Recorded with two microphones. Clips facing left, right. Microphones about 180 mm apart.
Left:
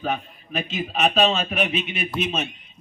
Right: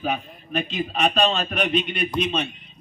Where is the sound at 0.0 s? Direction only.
Centre (ahead or behind).